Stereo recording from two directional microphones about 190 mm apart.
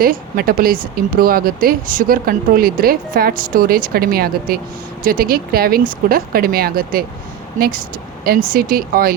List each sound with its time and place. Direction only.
0.0 s speech: 50° right (ahead or behind)